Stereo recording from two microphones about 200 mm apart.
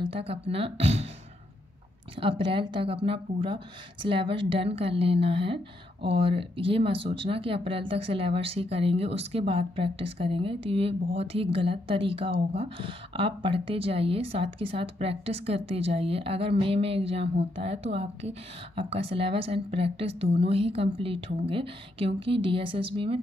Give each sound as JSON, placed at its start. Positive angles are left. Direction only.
{"t": 0.0, "sound": "speech", "side_deg": -30}
{"t": 2.1, "sound": "speech", "side_deg": -25}